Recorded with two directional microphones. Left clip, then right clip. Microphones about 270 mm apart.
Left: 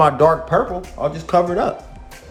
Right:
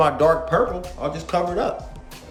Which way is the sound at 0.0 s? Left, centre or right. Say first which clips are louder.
Left 4 dB; centre.